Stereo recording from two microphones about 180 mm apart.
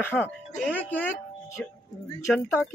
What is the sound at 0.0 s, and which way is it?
Speech, 10° left (ahead or behind).